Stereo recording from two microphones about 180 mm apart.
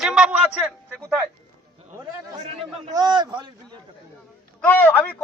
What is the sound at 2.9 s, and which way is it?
Speech, 25° right (ahead or behind).